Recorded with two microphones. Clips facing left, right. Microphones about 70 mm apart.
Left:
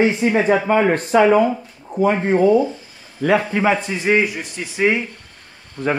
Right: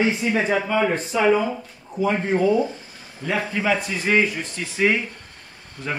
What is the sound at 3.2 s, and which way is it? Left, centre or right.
Speech, left.